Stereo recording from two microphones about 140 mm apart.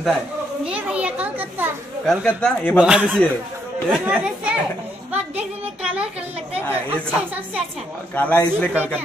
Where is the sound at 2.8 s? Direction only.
5° right (ahead or behind).